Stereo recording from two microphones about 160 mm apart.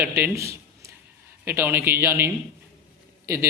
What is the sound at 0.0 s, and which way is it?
A man's voice, 15° right (ahead or behind).